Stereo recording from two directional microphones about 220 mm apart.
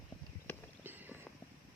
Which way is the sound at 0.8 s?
10° right (ahead or behind).